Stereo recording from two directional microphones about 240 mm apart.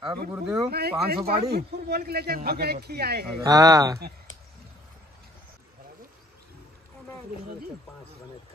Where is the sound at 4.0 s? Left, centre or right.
Right.